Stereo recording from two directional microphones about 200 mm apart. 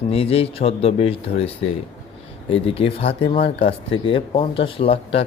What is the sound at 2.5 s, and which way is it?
Speech, 30° left (ahead or behind).